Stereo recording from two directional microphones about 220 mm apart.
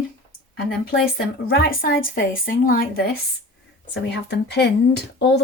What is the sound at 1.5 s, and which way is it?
A woman's voice, 40° left (ahead or behind).